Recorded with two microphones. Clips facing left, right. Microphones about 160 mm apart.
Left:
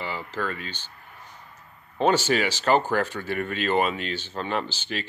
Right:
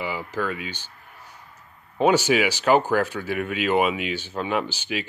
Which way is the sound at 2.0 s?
10° right (ahead or behind).